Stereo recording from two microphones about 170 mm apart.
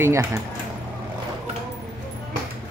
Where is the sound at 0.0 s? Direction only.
15° right (ahead or behind).